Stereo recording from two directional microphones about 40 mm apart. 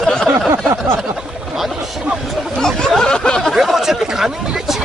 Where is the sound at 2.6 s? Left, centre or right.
Centre.